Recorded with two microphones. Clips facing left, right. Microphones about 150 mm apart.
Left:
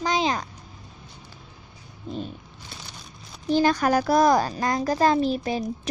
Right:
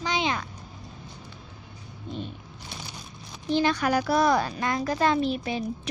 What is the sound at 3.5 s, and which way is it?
Speech, 40° left (ahead or behind).